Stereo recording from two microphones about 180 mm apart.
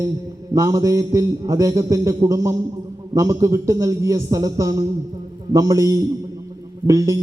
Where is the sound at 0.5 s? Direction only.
20° right (ahead or behind).